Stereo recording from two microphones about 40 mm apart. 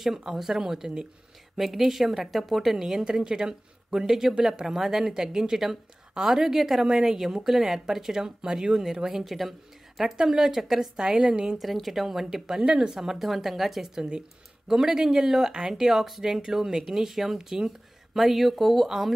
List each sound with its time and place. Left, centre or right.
0.0 s a woman's voice: centre
3.0 s speech: centre
10.1 s speech: centre
11.6 s a woman's voice: centre
13.9 s speech: centre